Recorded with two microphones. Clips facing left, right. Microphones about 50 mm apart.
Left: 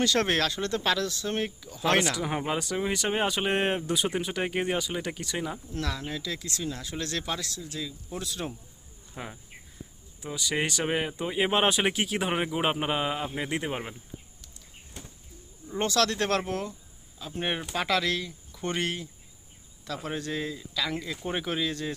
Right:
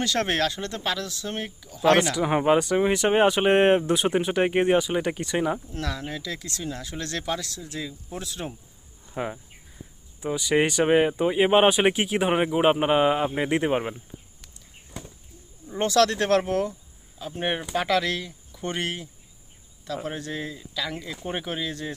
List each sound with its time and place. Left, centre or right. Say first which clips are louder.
0.0 s speech: right 1 dB; right
2.2 s speech: right 7 dB; right
2.5 s speech: right 11 dB; right
7.6 s speech: right 2 dB; right
8.2 s speech: even; centre
12.9 s speech: right 8 dB; right
15.8 s speech: right 5 dB; right
17.7 s speech: right 3 dB; right
19.9 s speech: right 2 dB; centre
21.1 s speech: right 1 dB; centre
21.4 s speech: left 1 dB; centre